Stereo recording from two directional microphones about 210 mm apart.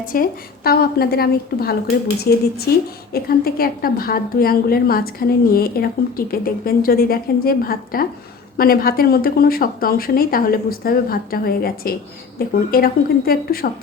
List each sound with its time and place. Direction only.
0.0 s a woman's voice: 40° left (ahead or behind)